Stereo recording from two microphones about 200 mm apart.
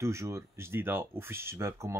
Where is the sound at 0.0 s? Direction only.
15° right (ahead or behind).